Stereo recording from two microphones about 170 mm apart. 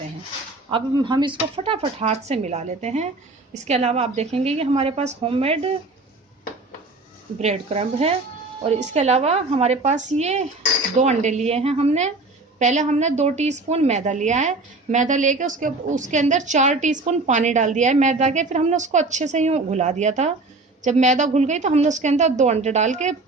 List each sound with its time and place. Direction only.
0.7 s speech: 25° right (ahead or behind)
7.3 s a woman's voice: 40° right (ahead or behind)